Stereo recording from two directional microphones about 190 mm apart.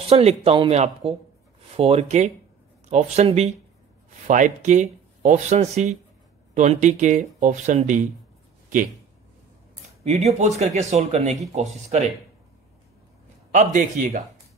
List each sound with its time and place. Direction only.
0.0 s speech: 35° right (ahead or behind)
10.0 s speech: 35° right (ahead or behind)
13.5 s speech: 40° right (ahead or behind)